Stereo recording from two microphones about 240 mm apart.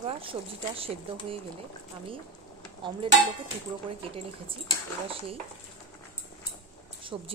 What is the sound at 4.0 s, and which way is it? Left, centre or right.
Speech, right.